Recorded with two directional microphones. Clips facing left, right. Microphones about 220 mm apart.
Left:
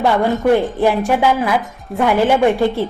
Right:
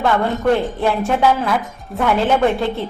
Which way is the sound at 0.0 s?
15° left (ahead or behind).